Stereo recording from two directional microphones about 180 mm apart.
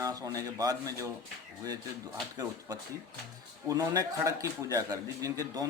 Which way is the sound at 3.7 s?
20° right (ahead or behind).